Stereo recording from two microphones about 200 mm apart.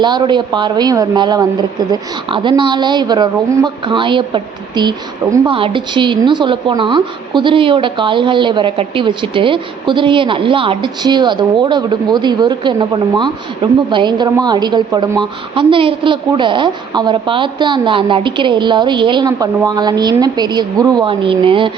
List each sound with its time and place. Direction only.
0.0 s a woman's voice: 20° right (ahead or behind)